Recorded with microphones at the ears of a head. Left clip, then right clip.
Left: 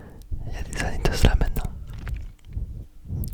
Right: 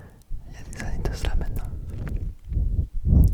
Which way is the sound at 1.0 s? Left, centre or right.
Left.